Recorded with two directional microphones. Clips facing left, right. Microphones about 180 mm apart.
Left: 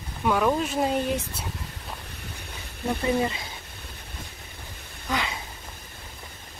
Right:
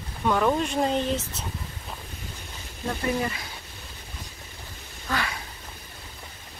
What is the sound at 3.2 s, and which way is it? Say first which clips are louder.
Speech: left 3 dB; 25° left (ahead or behind).